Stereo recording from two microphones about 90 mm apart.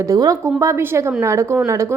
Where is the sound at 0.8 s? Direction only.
25° right (ahead or behind).